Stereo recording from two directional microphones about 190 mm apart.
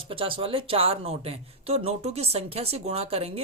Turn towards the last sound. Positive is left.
turn(degrees=-30)  # may be behind; listen again after turning